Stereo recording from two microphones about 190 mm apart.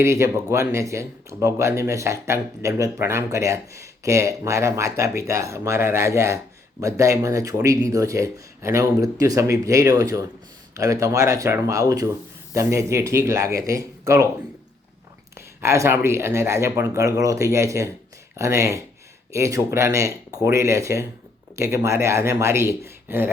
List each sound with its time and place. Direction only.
0.0 s speech: 15° right (ahead or behind)
15.4 s speech: 15° right (ahead or behind)